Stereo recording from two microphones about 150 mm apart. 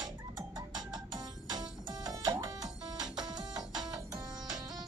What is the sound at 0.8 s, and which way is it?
Music, 25° right (ahead or behind).